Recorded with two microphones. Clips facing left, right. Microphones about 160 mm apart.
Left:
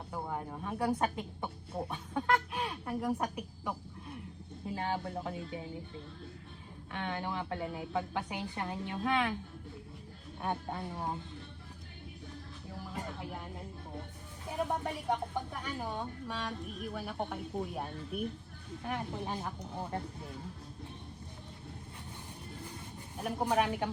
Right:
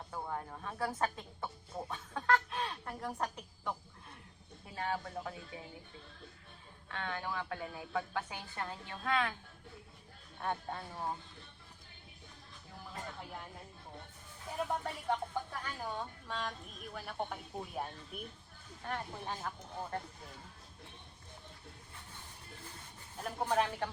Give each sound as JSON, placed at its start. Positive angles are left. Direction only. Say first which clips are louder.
{"t": 0.1, "sound": "speech", "louder": "left 3 dB", "side_deg": 15}
{"t": 4.6, "sound": "a woman's voice", "louder": "left 3 dB", "side_deg": 25}
{"t": 6.9, "sound": "a woman's voice", "louder": "left 3 dB", "side_deg": 20}
{"t": 10.4, "sound": "a woman's voice", "louder": "left 2 dB", "side_deg": 15}
{"t": 12.9, "sound": "a woman's voice", "louder": "left 3 dB", "side_deg": 15}
{"t": 14.5, "sound": "a woman's voice", "louder": "left 3 dB", "side_deg": 15}
{"t": 18.9, "sound": "a woman's voice", "louder": "left 3 dB", "side_deg": 15}
{"t": 23.1, "sound": "a woman's voice", "louder": "left 2 dB", "side_deg": 15}